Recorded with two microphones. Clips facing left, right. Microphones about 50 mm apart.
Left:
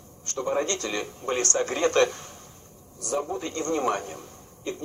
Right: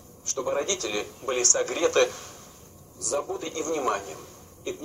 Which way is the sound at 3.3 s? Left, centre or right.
Left.